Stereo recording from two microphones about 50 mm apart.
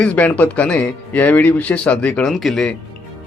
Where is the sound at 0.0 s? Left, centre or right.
Left.